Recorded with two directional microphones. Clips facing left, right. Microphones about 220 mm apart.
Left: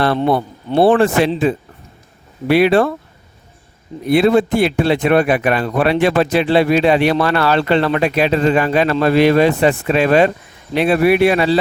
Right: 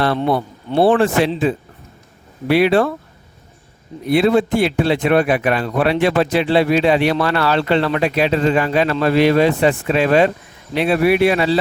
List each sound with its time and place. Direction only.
0.9 s speech: 50° left (ahead or behind)
4.1 s speech: 50° left (ahead or behind)